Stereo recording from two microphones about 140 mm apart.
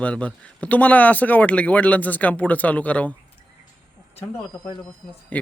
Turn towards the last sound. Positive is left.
turn(degrees=35)  # may be behind; listen again after turning